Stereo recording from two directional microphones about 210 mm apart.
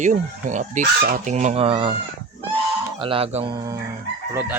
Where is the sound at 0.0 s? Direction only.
35° right (ahead or behind).